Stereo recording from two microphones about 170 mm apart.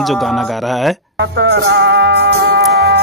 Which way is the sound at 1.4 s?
90° right.